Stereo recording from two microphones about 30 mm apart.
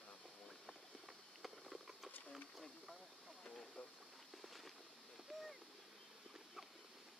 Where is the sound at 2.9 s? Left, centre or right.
Centre.